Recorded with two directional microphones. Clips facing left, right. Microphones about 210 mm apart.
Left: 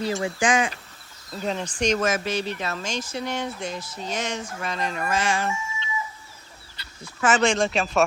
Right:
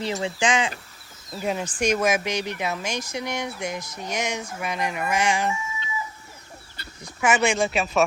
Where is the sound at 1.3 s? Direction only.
10° right (ahead or behind).